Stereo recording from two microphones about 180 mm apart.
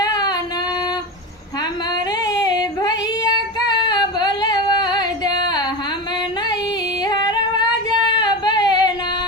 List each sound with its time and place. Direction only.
0.0 s singing: 20° left (ahead or behind)
2.2 s singing: 20° left (ahead or behind)
7.0 s singing: 25° left (ahead or behind)